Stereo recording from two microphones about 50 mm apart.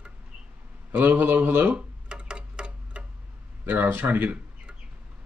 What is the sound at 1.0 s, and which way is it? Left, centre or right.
Speech, right.